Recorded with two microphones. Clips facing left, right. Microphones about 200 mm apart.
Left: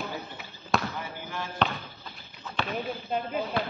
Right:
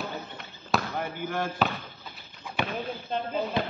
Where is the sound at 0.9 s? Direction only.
55° right (ahead or behind).